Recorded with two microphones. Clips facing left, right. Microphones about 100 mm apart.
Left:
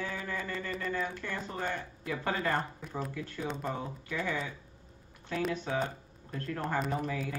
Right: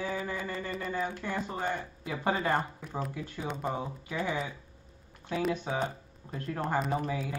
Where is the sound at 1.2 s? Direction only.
20° right (ahead or behind).